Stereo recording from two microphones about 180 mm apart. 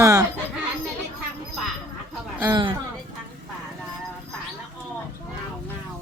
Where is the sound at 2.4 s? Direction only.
25° right (ahead or behind).